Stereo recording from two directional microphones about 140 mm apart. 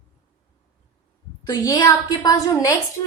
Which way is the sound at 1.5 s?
25° left (ahead or behind).